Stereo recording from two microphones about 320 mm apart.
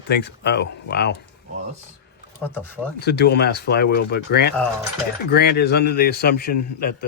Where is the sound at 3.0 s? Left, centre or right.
Left.